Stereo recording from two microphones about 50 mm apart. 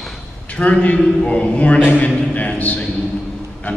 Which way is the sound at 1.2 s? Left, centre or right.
Centre.